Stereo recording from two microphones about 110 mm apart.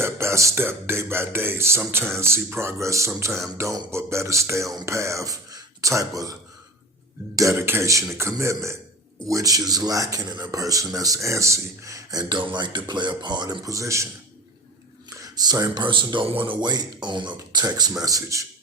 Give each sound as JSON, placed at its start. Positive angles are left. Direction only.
{"t": 0.0, "sound": "speech", "side_deg": -25}
{"t": 7.3, "sound": "a man's voice", "side_deg": -25}
{"t": 15.1, "sound": "a man's voice", "side_deg": -35}